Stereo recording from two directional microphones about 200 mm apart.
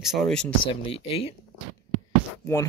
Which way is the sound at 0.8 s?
30° left (ahead or behind).